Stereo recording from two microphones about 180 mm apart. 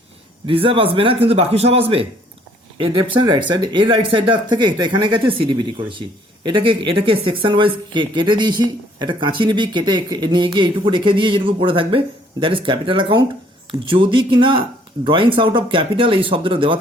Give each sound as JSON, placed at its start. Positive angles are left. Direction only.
{"t": 0.4, "sound": "a man's voice", "side_deg": -30}